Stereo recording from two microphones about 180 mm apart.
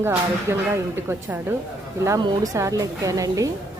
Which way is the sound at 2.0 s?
15° right (ahead or behind).